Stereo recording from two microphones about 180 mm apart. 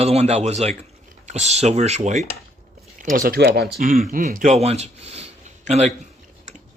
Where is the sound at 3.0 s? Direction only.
50° right (ahead or behind).